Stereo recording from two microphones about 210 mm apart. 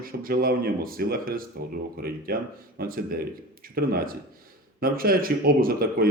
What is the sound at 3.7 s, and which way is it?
Speech, 45° right (ahead or behind).